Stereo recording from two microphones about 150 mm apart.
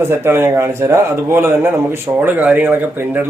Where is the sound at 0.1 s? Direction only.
15° right (ahead or behind).